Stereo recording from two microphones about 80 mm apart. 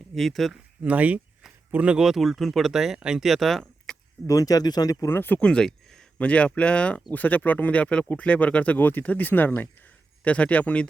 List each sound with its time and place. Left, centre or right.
0.1 s speech: centre
0.5 s speech: centre
2.0 s speech: centre
4.3 s speech: left
5.0 s speech: left
5.4 s speech: centre